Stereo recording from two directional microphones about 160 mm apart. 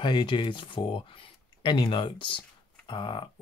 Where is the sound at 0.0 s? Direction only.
30° left (ahead or behind).